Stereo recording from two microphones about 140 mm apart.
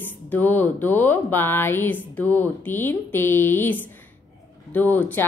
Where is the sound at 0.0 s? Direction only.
15° left (ahead or behind).